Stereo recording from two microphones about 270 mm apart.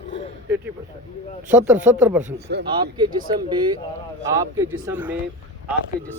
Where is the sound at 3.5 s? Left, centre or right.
Centre.